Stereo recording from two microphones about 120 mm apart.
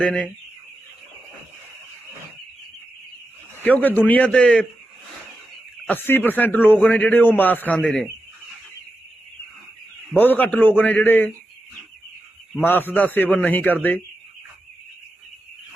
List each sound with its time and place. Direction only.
0.0 s a man's voice: 10° left (ahead or behind)
3.6 s a man's voice: 15° left (ahead or behind)
5.8 s a man's voice: 15° left (ahead or behind)
10.2 s a man's voice: 15° left (ahead or behind)
12.6 s a man's voice: 15° left (ahead or behind)